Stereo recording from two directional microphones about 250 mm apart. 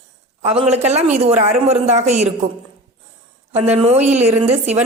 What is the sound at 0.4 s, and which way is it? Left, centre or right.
A woman's voice, right.